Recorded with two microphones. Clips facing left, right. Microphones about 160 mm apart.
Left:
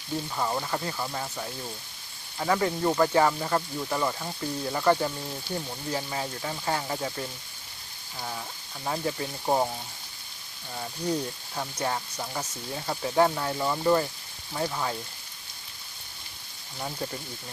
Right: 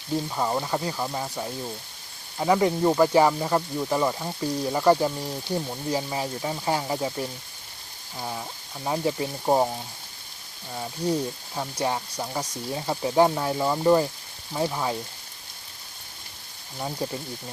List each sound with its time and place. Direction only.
0.3 s speech: 15° right (ahead or behind)
10.8 s speech: 10° right (ahead or behind)
16.7 s speech: 15° right (ahead or behind)